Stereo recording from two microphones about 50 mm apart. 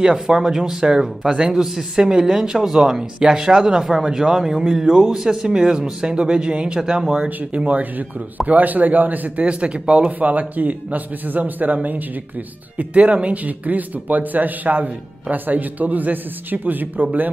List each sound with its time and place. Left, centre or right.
0.0 s speech: centre
7.2 s speech: right
9.5 s speech: right
10.1 s speech: right